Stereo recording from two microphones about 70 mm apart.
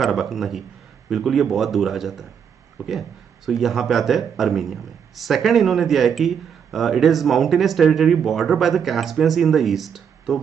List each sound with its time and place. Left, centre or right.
0.0 s speech: centre